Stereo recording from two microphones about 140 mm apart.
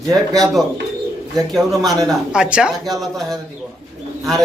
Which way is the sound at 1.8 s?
25° right (ahead or behind).